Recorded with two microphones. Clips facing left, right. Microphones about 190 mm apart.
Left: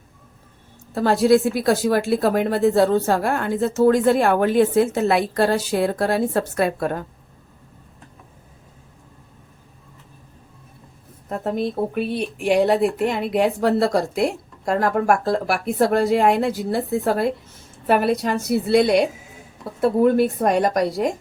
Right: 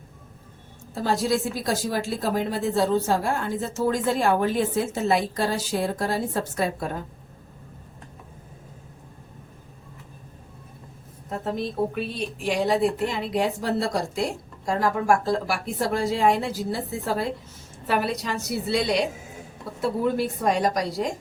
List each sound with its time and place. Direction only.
0.9 s a woman's voice: 65° left (ahead or behind)
11.3 s a woman's voice: 55° left (ahead or behind)